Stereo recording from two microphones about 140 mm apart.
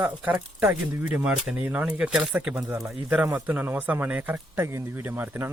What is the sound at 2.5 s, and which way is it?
Speech, 20° right (ahead or behind).